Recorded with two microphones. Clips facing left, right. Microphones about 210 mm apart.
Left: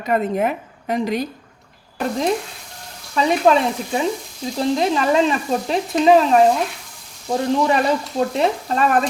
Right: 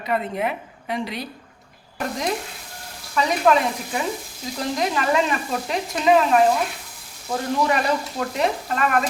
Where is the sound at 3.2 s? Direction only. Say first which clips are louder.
Left 4 dB; 30° left (ahead or behind).